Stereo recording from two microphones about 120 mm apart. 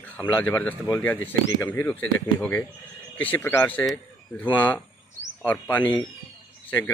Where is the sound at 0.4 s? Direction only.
15° left (ahead or behind).